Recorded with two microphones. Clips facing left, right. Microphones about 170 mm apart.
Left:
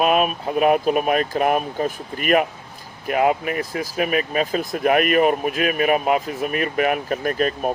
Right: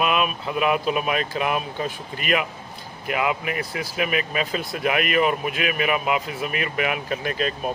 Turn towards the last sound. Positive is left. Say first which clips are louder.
# left 4 dB
turn(degrees=45)  # may be behind; listen again after turning